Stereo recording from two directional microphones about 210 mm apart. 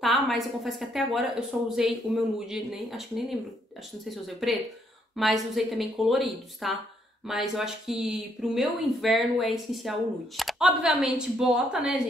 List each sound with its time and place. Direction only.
0.0 s a woman's voice: centre (ahead or behind)